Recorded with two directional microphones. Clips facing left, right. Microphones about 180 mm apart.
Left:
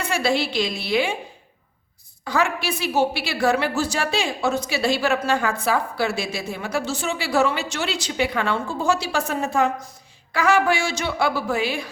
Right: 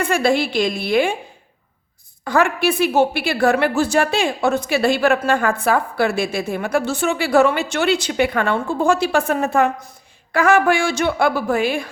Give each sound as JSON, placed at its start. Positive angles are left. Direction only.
{"t": 0.0, "sound": "a woman's voice", "side_deg": -50}
{"t": 2.2, "sound": "a woman's voice", "side_deg": -55}